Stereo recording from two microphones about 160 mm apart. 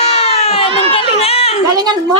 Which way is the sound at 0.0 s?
40° left (ahead or behind).